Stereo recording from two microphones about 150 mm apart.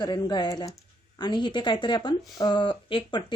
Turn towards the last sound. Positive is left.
turn(degrees=35)  # may be behind; listen again after turning